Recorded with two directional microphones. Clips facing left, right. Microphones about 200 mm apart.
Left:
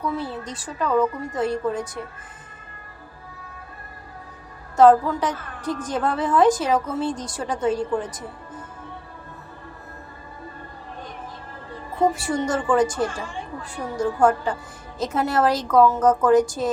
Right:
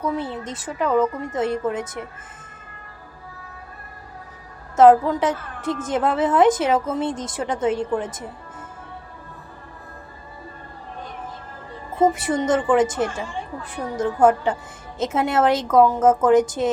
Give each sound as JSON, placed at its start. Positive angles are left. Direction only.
{"t": 0.0, "sound": "a woman's voice", "side_deg": -20}
{"t": 4.8, "sound": "a woman's voice", "side_deg": -20}
{"t": 12.1, "sound": "a woman's voice", "side_deg": -20}